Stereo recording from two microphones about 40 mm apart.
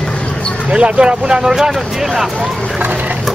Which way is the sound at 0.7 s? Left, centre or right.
Right.